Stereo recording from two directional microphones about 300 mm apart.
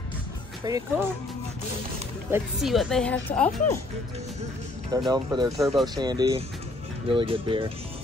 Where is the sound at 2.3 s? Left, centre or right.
Centre.